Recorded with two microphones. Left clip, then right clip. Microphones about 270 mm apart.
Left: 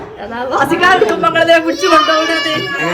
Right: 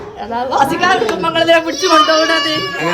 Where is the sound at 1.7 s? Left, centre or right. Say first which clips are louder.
Left 1 dB; right.